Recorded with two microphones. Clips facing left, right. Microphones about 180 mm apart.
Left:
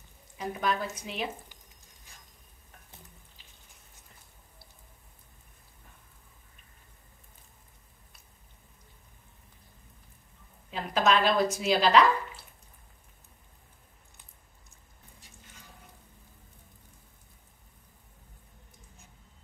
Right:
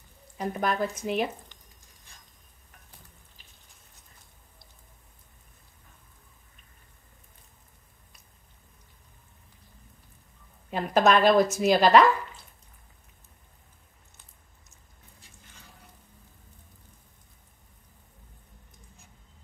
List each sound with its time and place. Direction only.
0.4 s a woman's voice: 45° right (ahead or behind)
10.7 s a woman's voice: 50° right (ahead or behind)